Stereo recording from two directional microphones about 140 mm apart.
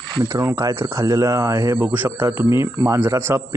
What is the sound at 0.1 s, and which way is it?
Speech, 25° right (ahead or behind).